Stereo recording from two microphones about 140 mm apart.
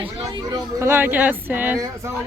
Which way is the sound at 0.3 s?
25° right (ahead or behind).